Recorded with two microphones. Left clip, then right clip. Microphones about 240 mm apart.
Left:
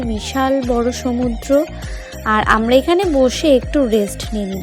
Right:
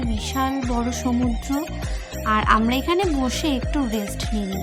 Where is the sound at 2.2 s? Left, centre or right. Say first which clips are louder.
Left 4 dB; centre.